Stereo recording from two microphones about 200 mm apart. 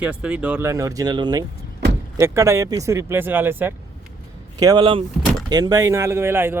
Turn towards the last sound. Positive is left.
turn(degrees=-10)  # may be behind; listen again after turning